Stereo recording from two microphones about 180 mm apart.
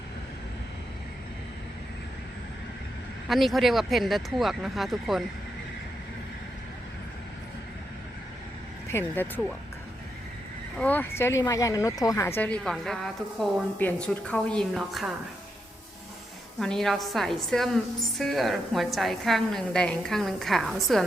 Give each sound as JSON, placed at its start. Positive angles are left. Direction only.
{"t": 3.2, "sound": "a woman's voice", "side_deg": 0}
{"t": 8.9, "sound": "speech", "side_deg": 10}
{"t": 10.8, "sound": "speech", "side_deg": 10}
{"t": 12.4, "sound": "a woman's voice", "side_deg": 5}
{"t": 16.6, "sound": "a woman's voice", "side_deg": 0}